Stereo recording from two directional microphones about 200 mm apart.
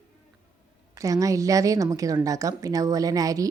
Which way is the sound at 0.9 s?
15° right (ahead or behind).